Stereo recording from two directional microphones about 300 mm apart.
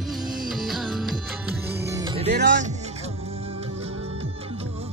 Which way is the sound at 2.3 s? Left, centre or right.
Right.